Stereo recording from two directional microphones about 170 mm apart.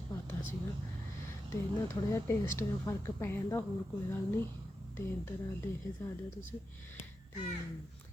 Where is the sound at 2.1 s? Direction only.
15° left (ahead or behind).